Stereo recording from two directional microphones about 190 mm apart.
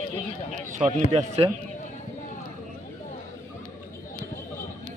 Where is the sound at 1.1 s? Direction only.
30° right (ahead or behind).